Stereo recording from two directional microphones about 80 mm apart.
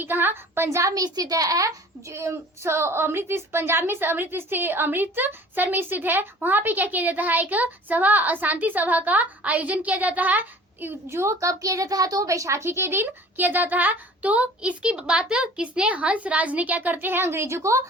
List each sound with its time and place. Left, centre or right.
0.0 s a woman's voice: right